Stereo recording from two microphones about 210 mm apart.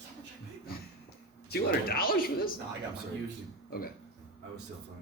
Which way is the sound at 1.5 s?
45° left (ahead or behind).